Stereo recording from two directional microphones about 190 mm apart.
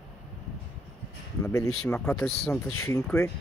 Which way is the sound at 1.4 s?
15° left (ahead or behind).